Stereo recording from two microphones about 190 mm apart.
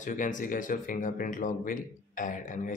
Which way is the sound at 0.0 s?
45° left (ahead or behind).